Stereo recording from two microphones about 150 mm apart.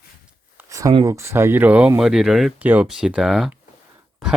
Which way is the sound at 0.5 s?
20° right (ahead or behind).